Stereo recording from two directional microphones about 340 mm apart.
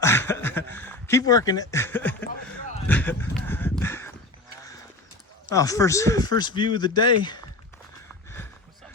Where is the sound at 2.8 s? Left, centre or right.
Centre.